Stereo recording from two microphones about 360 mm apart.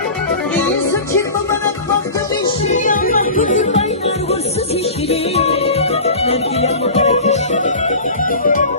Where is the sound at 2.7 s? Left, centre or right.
Left.